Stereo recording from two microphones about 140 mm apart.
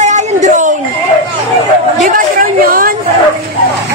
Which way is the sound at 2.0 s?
80° right.